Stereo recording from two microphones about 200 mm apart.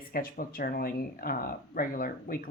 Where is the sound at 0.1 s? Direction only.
45° left (ahead or behind).